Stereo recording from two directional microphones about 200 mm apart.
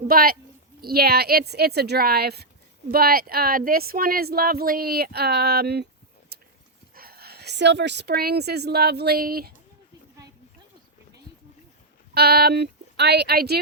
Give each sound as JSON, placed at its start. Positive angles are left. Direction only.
{"t": 0.1, "sound": "speech", "side_deg": -45}
{"t": 12.1, "sound": "speech", "side_deg": -50}